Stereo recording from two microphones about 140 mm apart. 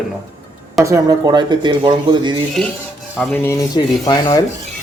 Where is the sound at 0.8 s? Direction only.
25° right (ahead or behind).